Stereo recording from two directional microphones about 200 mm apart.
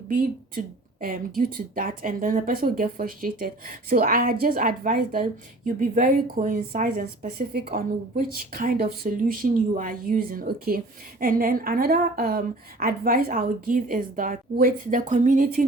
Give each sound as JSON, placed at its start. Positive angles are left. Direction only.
{"t": 1.0, "sound": "speech", "side_deg": -45}